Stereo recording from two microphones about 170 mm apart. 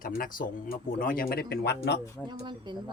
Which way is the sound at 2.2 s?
5° left (ahead or behind).